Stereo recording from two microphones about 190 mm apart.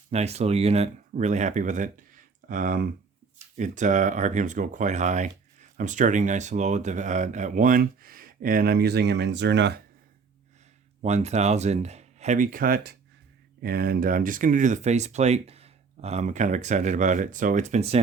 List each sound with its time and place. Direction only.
0.1 s speech: 35° right (ahead or behind); by 9.8 s 65° right (ahead or behind)
11.0 s speech: 35° right (ahead or behind)